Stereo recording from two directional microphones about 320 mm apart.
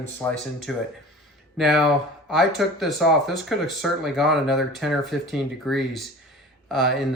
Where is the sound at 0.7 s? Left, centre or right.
Centre.